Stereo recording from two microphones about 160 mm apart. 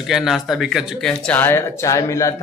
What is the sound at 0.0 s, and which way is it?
Speech, centre (ahead or behind).